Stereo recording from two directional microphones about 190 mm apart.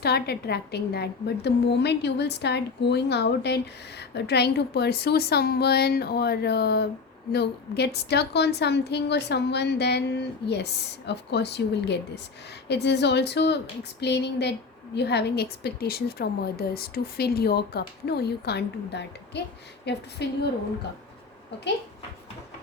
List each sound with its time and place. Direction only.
0.0 s a woman's voice: 60° left (ahead or behind)